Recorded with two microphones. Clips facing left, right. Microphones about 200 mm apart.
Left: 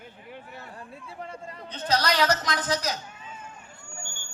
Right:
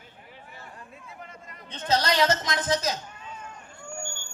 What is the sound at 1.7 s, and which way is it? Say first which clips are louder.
A man's voice: right 1 dB; 25° right (ahead or behind).